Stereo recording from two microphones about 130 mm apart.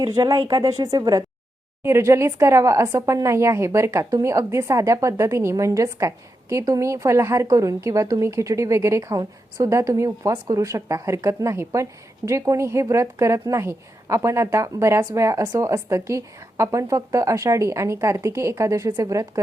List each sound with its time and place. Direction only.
0.0 s speech: 30° right (ahead or behind)
1.8 s speech: 20° right (ahead or behind)